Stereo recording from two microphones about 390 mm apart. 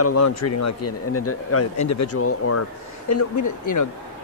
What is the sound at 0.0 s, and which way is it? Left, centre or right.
Speech, left.